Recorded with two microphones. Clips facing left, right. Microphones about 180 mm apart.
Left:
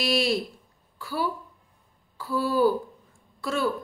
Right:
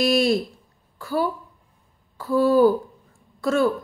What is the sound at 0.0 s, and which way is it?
A woman's voice, 45° right (ahead or behind).